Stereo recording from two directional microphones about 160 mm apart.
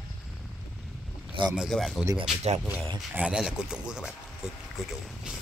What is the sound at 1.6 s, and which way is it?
Speech, centre (ahead or behind).